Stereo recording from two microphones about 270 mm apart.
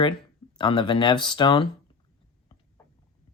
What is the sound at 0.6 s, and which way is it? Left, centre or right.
Speech, centre.